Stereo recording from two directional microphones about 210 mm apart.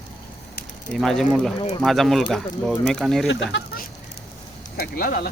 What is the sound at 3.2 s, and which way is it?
Speech, 60° left (ahead or behind).